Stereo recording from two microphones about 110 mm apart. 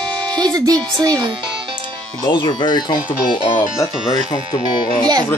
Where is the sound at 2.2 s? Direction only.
40° left (ahead or behind).